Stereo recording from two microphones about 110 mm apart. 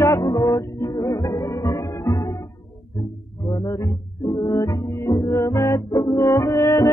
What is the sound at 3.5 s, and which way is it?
Music, 30° left (ahead or behind).